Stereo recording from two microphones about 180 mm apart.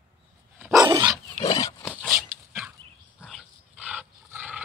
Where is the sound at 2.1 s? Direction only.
15° right (ahead or behind).